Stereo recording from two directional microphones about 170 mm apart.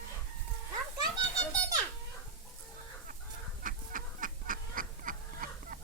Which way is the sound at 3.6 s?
55° right (ahead or behind).